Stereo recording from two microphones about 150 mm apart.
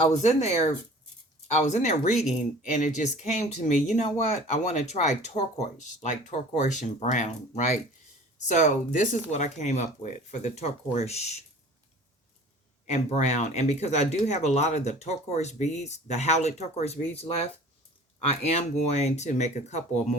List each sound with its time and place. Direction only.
0.1 s speech: 50° left (ahead or behind)
12.9 s speech: 50° left (ahead or behind)